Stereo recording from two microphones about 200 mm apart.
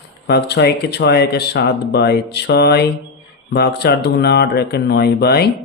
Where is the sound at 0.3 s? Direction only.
55° left (ahead or behind).